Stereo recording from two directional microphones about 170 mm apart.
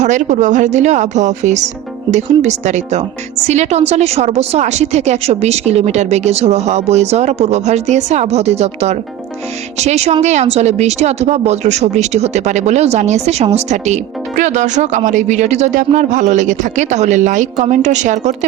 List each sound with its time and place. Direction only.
0.0 s a woman's voice: 45° right (ahead or behind)